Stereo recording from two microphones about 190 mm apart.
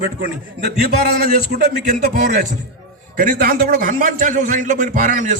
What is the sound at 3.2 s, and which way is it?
A man's voice, 45° right (ahead or behind).